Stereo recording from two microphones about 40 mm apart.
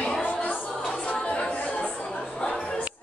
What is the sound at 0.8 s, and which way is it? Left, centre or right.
Music, left.